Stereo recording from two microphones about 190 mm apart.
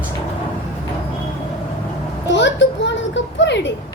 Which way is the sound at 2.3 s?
70° left (ahead or behind).